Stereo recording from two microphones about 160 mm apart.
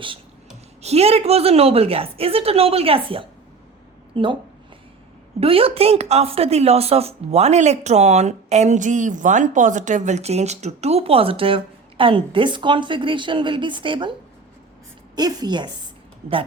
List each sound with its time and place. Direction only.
0.8 s a woman's voice: 40° right (ahead or behind)
5.4 s a woman's voice: 35° right (ahead or behind)